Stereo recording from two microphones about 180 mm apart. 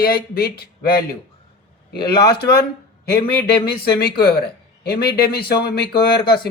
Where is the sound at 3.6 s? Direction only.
60° left (ahead or behind).